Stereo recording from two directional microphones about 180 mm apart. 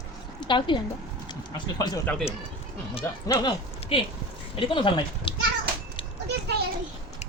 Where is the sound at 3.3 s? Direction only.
25° left (ahead or behind).